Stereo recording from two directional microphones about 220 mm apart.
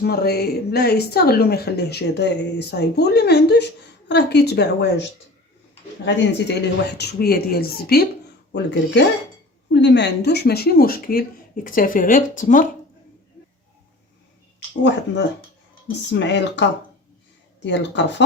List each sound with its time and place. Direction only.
0.0 s speech: 45° left (ahead or behind)
6.1 s speech: 50° left (ahead or behind); by 12.6 s 35° left (ahead or behind)
14.7 s speech: 50° left (ahead or behind)